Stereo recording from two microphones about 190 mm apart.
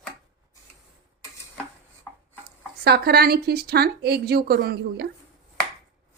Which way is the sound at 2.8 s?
55° right (ahead or behind).